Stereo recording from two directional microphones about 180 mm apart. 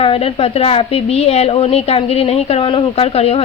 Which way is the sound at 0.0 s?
30° left (ahead or behind).